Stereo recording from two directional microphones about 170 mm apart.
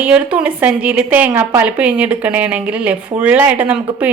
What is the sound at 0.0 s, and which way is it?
Speech, 10° right (ahead or behind).